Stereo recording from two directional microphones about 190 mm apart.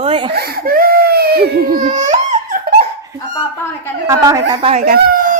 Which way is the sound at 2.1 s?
40° right (ahead or behind).